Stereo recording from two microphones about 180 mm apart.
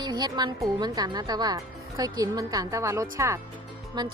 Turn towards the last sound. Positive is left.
turn(degrees=-25)  # may be behind; listen again after turning